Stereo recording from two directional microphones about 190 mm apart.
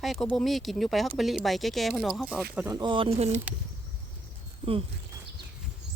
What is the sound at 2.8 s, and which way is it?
Speech, 25° right (ahead or behind).